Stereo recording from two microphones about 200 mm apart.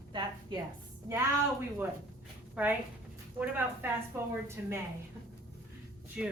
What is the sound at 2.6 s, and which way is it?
Speech, 5° right (ahead or behind).